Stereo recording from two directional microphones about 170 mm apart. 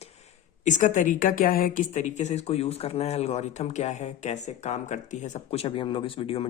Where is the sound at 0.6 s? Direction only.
50° left (ahead or behind).